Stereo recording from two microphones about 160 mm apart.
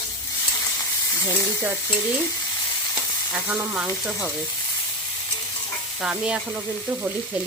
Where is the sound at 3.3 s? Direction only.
10° right (ahead or behind).